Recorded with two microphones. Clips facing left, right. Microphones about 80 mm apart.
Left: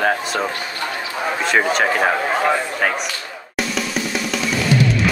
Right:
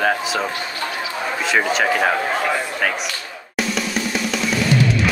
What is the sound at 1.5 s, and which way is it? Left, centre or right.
Speech, centre.